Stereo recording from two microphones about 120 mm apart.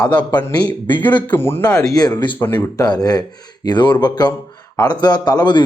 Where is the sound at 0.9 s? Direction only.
15° left (ahead or behind).